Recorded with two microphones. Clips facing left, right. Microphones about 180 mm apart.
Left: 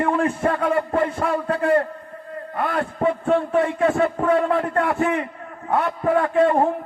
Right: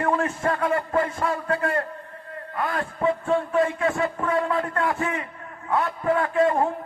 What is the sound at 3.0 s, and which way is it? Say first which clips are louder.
A man's voice: left 3 dB; 65° left (ahead or behind).